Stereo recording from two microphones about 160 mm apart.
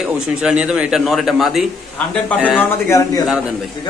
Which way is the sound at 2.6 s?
20° left (ahead or behind).